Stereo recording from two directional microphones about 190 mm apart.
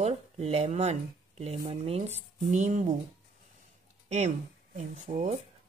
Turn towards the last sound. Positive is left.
turn(degrees=-40)  # may be behind; listen again after turning